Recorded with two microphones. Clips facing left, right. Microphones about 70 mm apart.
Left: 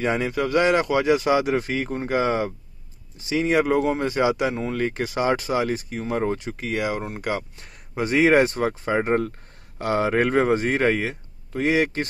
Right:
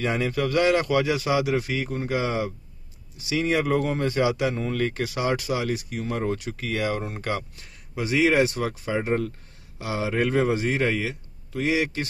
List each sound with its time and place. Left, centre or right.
0.0 s a man's voice: left
6.9 s speech: centre
7.6 s a man's voice: left